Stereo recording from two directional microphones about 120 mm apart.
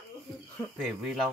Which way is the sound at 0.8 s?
Centre (ahead or behind).